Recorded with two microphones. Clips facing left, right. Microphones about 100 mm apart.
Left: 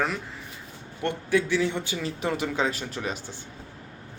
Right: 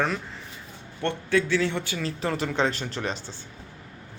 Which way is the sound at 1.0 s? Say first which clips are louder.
Even; 15° left (ahead or behind).